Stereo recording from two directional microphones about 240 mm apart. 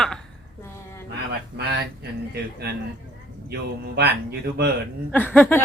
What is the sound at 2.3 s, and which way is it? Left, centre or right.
Speech, right.